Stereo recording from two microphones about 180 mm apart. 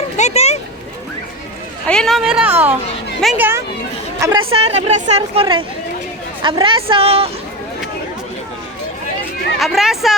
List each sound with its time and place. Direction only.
0.2 s a sound: 40° left (ahead or behind)
1.9 s speech: centre (ahead or behind)
4.4 s a woman's voice: 30° right (ahead or behind)
9.6 s speech: centre (ahead or behind)